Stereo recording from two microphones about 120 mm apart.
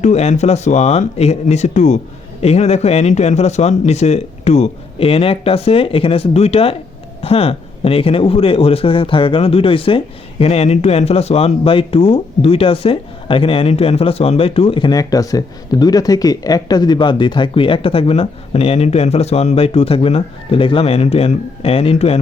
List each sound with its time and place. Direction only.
0.0 s speech: 70° left (ahead or behind)
2.4 s speech: 60° left (ahead or behind)